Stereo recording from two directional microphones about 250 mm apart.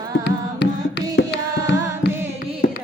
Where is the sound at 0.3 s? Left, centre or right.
Left.